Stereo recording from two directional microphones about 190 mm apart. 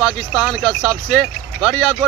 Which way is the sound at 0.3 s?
Centre (ahead or behind).